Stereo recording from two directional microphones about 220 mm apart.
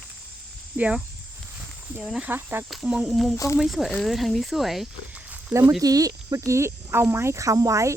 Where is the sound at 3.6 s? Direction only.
Centre (ahead or behind).